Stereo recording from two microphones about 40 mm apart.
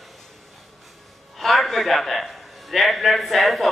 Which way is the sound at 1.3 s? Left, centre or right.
Centre.